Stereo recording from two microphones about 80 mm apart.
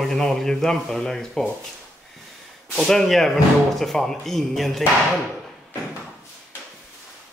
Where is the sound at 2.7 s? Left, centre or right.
Centre.